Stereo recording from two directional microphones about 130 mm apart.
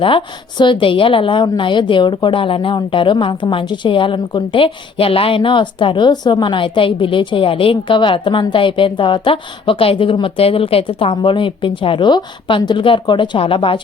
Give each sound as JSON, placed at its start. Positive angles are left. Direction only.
{"t": 0.0, "sound": "a woman's voice", "side_deg": 40}